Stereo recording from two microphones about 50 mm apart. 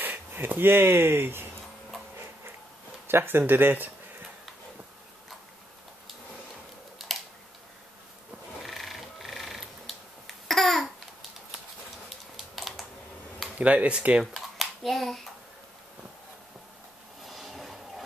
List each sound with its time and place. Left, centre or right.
0.0 s speech: right
3.1 s speech: right
7.0 s camera: centre
8.6 s finger snapping: centre
12.5 s typing: centre
13.6 s speech: right
14.2 s a sound: centre
17.2 s a sound: centre